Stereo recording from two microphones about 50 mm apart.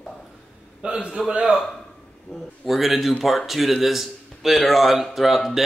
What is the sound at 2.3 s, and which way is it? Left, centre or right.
Speech, centre.